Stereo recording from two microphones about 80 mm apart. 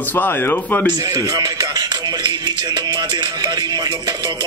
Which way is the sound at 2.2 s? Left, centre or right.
Right.